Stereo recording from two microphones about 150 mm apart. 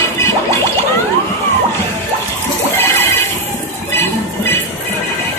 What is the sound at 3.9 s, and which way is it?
Music, 15° left (ahead or behind).